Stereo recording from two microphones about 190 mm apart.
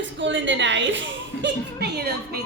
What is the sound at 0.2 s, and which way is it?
A woman's voice, 75° right (ahead or behind).